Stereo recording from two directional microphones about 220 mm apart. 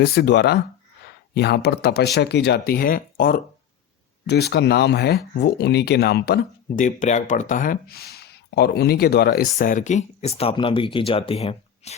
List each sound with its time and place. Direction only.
0.0 s speech: 45° left (ahead or behind); by 11.9 s 25° left (ahead or behind)